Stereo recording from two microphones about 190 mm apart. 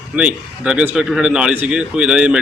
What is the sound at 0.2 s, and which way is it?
Speech, 5° right (ahead or behind).